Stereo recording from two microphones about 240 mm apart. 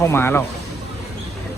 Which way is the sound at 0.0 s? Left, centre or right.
Centre.